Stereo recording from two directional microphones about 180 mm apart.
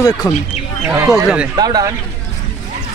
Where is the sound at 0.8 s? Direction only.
15° right (ahead or behind).